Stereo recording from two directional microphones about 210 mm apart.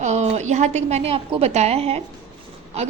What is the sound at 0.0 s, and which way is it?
A woman's voice, 35° right (ahead or behind).